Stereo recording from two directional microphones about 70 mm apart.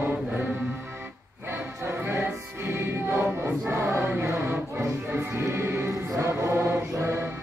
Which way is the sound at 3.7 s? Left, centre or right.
Right.